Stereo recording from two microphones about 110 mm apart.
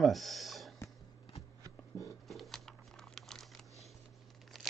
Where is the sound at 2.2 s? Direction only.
Centre (ahead or behind).